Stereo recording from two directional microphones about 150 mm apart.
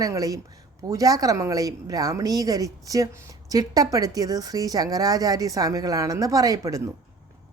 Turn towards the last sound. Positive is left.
turn(degrees=-25)  # may be behind; listen again after turning